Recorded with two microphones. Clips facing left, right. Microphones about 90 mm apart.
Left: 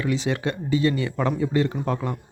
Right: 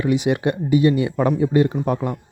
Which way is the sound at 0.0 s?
15° right (ahead or behind).